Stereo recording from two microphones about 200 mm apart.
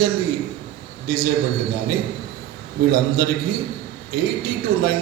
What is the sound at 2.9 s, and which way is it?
A man's voice, 50° right (ahead or behind).